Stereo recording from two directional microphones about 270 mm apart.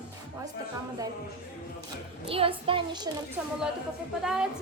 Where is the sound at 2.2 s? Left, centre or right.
Centre.